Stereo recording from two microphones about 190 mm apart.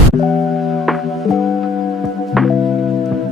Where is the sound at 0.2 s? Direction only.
Centre (ahead or behind).